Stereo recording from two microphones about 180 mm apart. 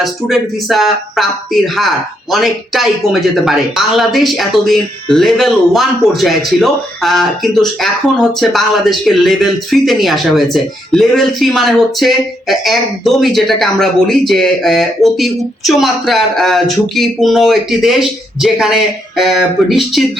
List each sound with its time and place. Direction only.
0.0 s speech: centre (ahead or behind)